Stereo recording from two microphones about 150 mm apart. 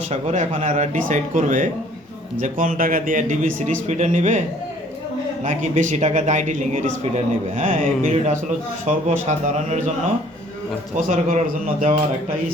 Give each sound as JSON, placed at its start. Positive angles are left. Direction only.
{"t": 0.1, "sound": "a man's voice", "side_deg": -50}
{"t": 10.9, "sound": "speech", "side_deg": -55}